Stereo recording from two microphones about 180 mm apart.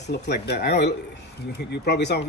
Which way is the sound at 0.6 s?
70° left (ahead or behind).